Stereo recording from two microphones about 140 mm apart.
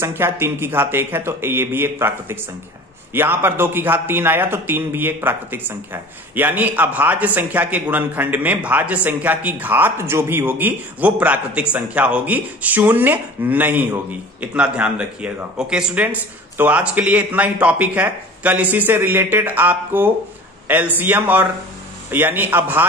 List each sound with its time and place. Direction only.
0.0 s speech: 15° right (ahead or behind)